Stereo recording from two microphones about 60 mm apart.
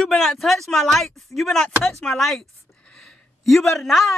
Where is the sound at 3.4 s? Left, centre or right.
Centre.